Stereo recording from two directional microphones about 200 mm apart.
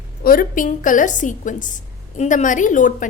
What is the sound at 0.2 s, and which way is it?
A woman's voice, 45° left (ahead or behind).